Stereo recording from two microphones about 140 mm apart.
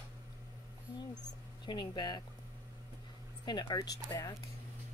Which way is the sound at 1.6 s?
30° left (ahead or behind).